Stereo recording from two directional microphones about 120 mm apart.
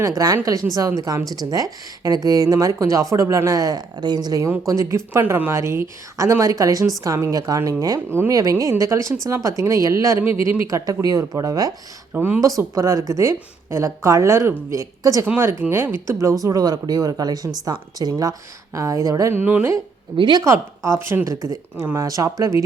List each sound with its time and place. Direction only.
0.7 s speech: 30° right (ahead or behind)
12.1 s speech: 15° right (ahead or behind)
12.4 s speech: 25° right (ahead or behind)
15.3 s speech: 15° right (ahead or behind)
20.1 s speech: 40° right (ahead or behind)
20.4 s speech: 25° right (ahead or behind)